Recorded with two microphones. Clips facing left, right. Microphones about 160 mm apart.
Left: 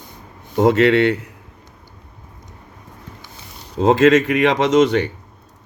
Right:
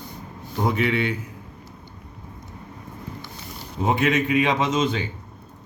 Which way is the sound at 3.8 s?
90° left.